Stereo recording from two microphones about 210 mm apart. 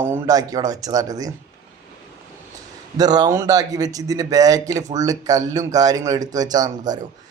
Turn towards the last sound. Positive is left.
turn(degrees=-20)  # may be behind; listen again after turning